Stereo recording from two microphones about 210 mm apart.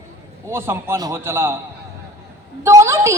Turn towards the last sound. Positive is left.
turn(degrees=-15)  # may be behind; listen again after turning